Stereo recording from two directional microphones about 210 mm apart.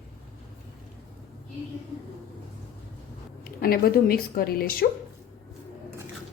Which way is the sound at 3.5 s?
45° left (ahead or behind).